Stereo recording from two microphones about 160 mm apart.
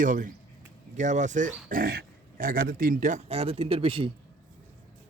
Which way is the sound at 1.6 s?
60° right (ahead or behind).